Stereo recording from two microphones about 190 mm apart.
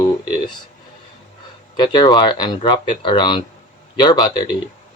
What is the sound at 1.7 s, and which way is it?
Speech, 20° left (ahead or behind).